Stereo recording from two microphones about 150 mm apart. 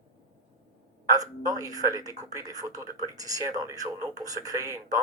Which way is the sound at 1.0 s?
25° right (ahead or behind).